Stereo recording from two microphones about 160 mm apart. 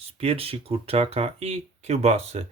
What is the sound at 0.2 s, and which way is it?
Speech, 40° right (ahead or behind).